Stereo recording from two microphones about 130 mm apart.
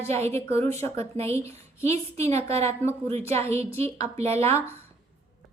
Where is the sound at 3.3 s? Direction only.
20° left (ahead or behind).